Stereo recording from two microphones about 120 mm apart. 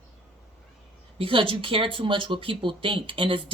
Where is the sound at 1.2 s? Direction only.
50° right (ahead or behind).